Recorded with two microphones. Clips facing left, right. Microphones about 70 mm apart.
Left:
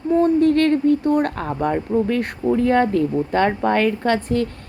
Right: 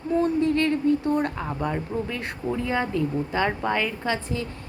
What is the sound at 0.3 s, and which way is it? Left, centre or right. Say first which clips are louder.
A woman's voice: left 6 dB; left.